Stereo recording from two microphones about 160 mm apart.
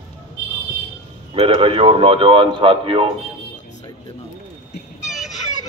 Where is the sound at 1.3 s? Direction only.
35° right (ahead or behind).